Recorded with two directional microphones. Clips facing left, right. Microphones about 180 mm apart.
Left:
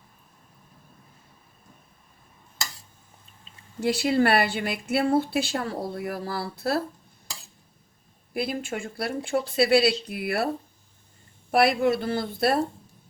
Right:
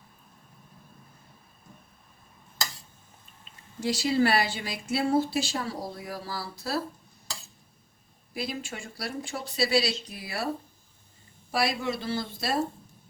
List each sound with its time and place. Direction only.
3.8 s a woman's voice: 60° left (ahead or behind)
8.3 s a woman's voice: 55° left (ahead or behind)
11.5 s a woman's voice: 55° left (ahead or behind)